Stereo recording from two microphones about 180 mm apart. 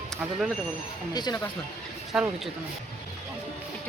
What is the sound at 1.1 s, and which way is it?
Speech, 20° left (ahead or behind).